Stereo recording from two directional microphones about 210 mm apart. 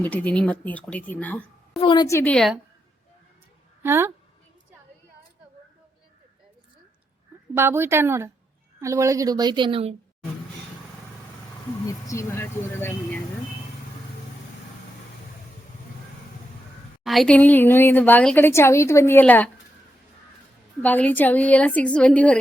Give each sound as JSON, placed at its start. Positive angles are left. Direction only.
{"t": 0.0, "sound": "a woman's voice", "side_deg": 5}
{"t": 1.8, "sound": "a woman's voice", "side_deg": 20}
{"t": 3.8, "sound": "speech", "side_deg": -10}
{"t": 7.5, "sound": "a woman's voice", "side_deg": -10}
{"t": 11.9, "sound": "a woman's voice", "side_deg": 15}
{"t": 17.0, "sound": "a woman's voice", "side_deg": 0}
{"t": 20.8, "sound": "a woman's voice", "side_deg": 10}